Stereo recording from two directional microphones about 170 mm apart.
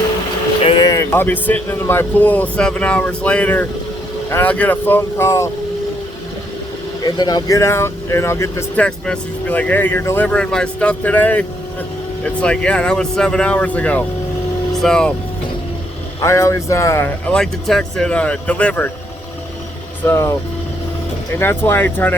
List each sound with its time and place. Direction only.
0.6 s vehicle: 30° left (ahead or behind)
0.9 s speech: 15° left (ahead or behind)
7.0 s speech: 25° left (ahead or behind); by 15.1 s 5° left (ahead or behind)
16.2 s speech: 20° left (ahead or behind)
20.1 s speech: 15° left (ahead or behind)
21.3 s speech: 15° left (ahead or behind)